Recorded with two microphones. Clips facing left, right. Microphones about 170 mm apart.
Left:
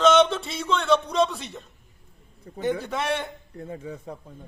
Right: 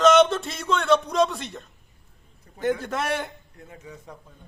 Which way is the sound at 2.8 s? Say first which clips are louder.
Even; centre (ahead or behind).